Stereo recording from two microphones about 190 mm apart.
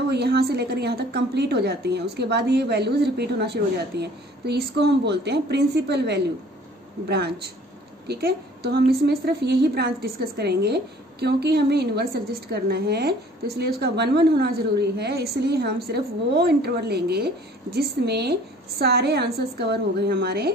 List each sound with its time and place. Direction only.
0.1 s a woman's voice: 60° right (ahead or behind)